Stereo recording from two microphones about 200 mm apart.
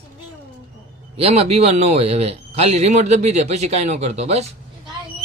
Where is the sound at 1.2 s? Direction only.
30° right (ahead or behind).